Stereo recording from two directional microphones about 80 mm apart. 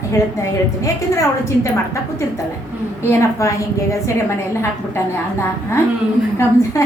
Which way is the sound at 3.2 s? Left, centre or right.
Left.